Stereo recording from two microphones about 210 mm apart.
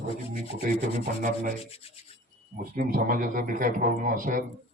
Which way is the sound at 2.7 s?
40° right (ahead or behind).